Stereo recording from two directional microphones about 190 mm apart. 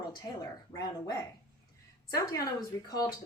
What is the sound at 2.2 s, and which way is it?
Speech, 20° left (ahead or behind).